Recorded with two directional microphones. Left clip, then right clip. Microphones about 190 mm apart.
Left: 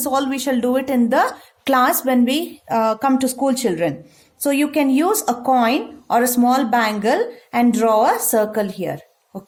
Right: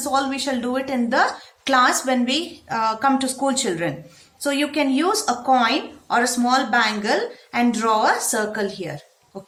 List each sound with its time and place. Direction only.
0.0 s a woman's voice: 50° left (ahead or behind)